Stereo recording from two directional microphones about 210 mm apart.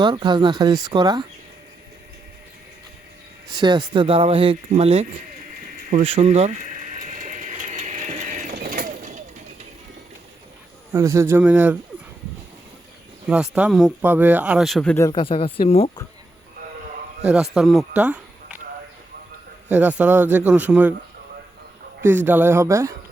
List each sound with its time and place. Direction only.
0.0 s speech: 20° right (ahead or behind)
3.5 s speech: 20° right (ahead or behind)
5.9 s a sound: 30° right (ahead or behind)
10.9 s a man's voice: 15° right (ahead or behind)
13.2 s speech: 5° right (ahead or behind)
15.1 s speech: 25° left (ahead or behind)
17.2 s speech: 5° right (ahead or behind)
19.6 s a man's voice: 10° right (ahead or behind)
22.0 s a man's voice: 10° right (ahead or behind)